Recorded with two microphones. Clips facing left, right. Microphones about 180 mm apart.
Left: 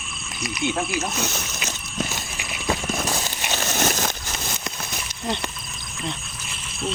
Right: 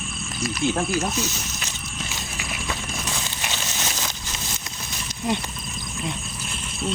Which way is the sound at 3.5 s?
55° left (ahead or behind).